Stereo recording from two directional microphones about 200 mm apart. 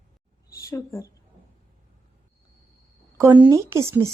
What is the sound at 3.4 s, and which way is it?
Speech, 15° right (ahead or behind).